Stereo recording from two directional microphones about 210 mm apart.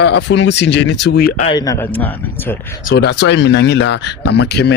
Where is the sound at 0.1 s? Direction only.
55° left (ahead or behind).